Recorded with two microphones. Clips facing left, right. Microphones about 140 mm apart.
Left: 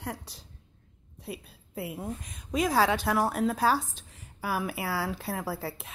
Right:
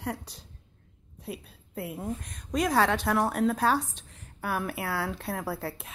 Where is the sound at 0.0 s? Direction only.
Centre (ahead or behind).